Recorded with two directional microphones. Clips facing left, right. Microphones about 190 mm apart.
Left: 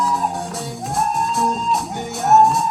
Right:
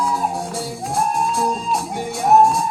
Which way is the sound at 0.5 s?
Centre (ahead or behind).